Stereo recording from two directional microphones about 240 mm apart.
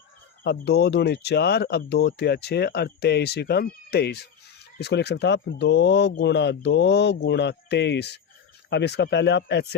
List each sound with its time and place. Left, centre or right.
0.4 s speech: left